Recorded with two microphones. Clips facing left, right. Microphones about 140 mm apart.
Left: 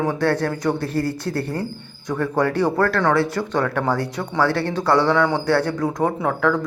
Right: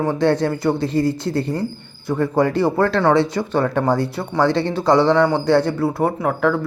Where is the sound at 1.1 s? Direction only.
10° left (ahead or behind).